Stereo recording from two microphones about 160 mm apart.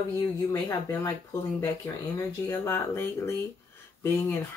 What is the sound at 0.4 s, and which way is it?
Speech, 20° left (ahead or behind).